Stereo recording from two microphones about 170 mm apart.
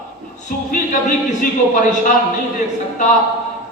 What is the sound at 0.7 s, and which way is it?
Speech, 50° left (ahead or behind).